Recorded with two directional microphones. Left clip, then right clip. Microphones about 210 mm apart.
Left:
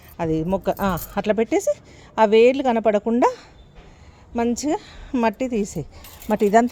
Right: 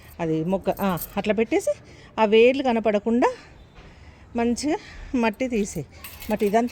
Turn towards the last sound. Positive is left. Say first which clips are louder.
# left 5 dB
turn(degrees=15)  # may be behind; listen again after turning